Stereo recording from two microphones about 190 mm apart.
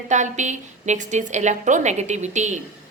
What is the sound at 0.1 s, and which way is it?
A woman's voice, 40° right (ahead or behind).